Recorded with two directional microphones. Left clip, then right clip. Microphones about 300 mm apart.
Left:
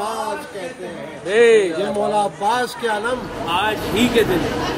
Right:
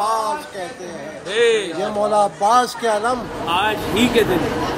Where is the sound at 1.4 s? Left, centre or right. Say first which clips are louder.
Left 4 dB; centre.